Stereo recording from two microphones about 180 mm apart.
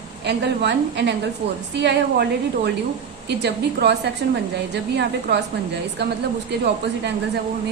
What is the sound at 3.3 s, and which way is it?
A woman's voice, 65° right (ahead or behind).